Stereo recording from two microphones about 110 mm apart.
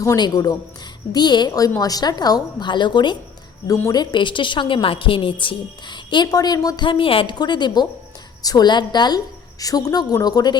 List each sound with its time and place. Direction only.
0.0 s a woman's voice: 35° left (ahead or behind)